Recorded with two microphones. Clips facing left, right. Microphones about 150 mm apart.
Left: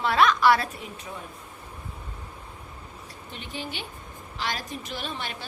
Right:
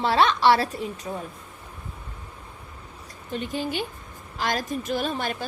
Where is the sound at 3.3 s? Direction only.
45° right (ahead or behind).